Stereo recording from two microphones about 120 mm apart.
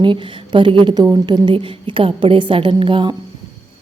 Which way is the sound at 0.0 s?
40° right (ahead or behind).